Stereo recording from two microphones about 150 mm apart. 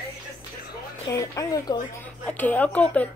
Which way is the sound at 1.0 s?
20° left (ahead or behind).